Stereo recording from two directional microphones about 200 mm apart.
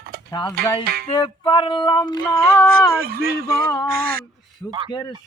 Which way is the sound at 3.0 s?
45° right (ahead or behind).